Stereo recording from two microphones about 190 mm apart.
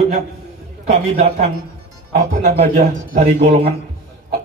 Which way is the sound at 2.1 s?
45° right (ahead or behind).